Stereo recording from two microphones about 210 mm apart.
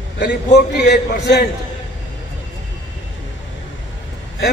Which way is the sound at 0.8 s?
55° left (ahead or behind).